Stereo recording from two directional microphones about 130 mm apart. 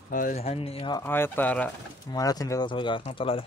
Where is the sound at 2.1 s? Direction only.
30° left (ahead or behind).